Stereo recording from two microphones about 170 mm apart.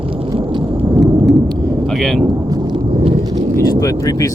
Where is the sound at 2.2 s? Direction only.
25° right (ahead or behind).